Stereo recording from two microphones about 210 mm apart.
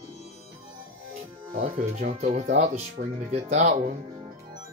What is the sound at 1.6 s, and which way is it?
Speech, 40° right (ahead or behind).